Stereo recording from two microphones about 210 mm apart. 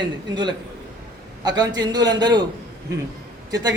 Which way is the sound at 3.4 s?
15° right (ahead or behind).